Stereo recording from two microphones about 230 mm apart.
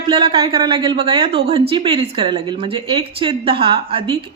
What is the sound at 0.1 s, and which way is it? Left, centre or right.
A woman's voice, right.